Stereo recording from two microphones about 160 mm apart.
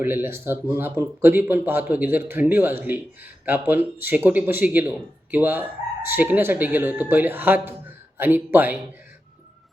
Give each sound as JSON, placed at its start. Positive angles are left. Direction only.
{"t": 0.0, "sound": "speech", "side_deg": -15}